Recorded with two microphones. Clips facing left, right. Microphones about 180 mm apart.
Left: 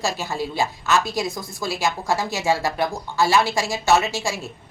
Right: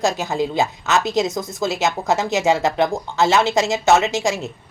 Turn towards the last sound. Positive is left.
turn(degrees=-20)  # may be behind; listen again after turning